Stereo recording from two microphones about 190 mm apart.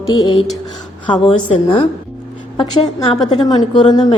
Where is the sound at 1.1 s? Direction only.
30° left (ahead or behind).